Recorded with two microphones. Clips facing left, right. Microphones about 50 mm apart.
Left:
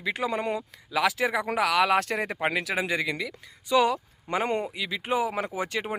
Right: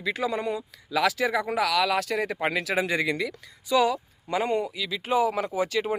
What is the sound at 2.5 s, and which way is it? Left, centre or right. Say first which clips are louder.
Speech: right 1 dB; centre.